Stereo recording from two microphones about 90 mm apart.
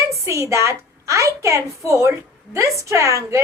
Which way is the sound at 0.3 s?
35° right (ahead or behind).